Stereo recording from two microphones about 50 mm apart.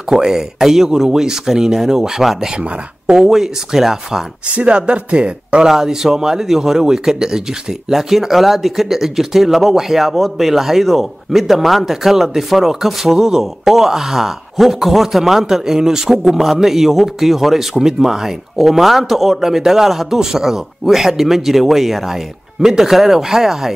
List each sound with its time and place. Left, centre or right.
0.1 s speech: centre
2.6 s speech: right
3.2 s speech: centre
4.5 s speech: right
5.7 s speech: centre